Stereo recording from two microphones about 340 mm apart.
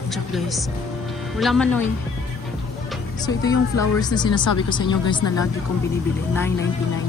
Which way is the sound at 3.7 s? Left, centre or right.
Left.